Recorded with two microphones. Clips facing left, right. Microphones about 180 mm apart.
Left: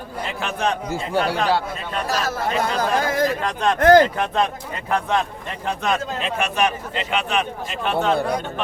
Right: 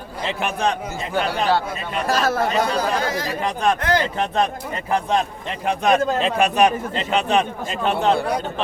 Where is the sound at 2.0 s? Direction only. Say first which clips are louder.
Right 5 dB; 55° right (ahead or behind).